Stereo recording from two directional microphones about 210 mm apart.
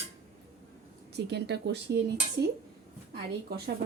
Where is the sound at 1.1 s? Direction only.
50° right (ahead or behind).